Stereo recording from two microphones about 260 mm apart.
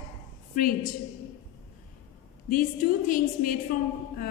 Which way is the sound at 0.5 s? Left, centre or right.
Left.